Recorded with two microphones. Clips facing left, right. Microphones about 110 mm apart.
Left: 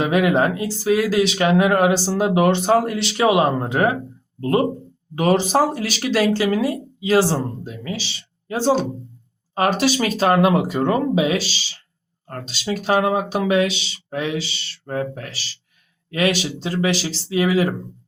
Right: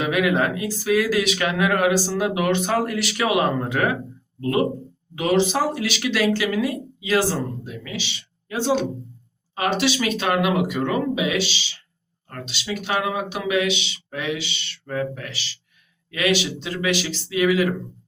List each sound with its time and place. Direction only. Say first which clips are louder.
0.0 s speech: left 3 dB; 30° left (ahead or behind)